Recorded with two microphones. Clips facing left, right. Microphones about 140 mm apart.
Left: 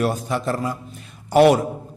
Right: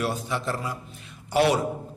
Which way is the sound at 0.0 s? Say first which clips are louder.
Left 6 dB; 45° left (ahead or behind).